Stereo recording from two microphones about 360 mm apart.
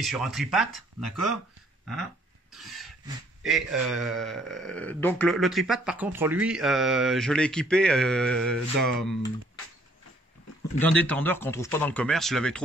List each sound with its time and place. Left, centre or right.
0.0 s speech: centre
2.5 s a sound: centre
3.4 s speech: centre
10.8 s speech: centre